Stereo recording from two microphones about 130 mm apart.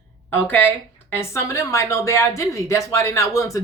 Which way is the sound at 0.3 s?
15° left (ahead or behind).